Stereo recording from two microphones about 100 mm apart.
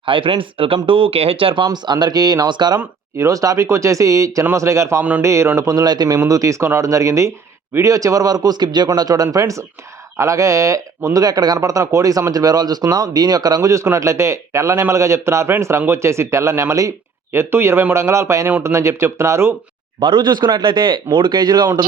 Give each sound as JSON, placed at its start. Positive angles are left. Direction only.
{"t": 0.0, "sound": "speech", "side_deg": -60}
{"t": 1.6, "sound": "speech", "side_deg": -45}
{"t": 2.7, "sound": "speech", "side_deg": -30}
{"t": 20.0, "sound": "speech", "side_deg": -50}